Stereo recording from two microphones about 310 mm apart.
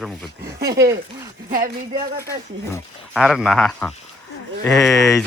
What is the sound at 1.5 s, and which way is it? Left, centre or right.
Speech, right.